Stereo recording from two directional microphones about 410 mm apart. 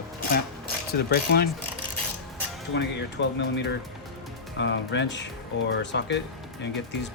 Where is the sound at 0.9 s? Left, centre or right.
Left.